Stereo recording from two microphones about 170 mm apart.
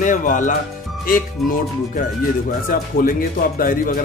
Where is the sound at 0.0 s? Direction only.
50° left (ahead or behind).